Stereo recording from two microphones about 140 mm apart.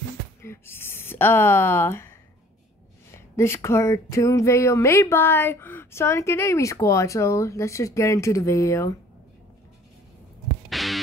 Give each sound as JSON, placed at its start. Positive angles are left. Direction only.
{"t": 0.4, "sound": "speech", "side_deg": 15}
{"t": 3.1, "sound": "a sound", "side_deg": 20}
{"t": 10.7, "sound": "music", "side_deg": 0}